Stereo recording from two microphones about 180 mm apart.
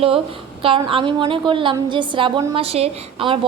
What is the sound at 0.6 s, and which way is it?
A woman's voice, 30° right (ahead or behind).